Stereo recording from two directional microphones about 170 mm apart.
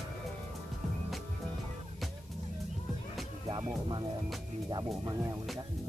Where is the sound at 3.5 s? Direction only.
25° right (ahead or behind).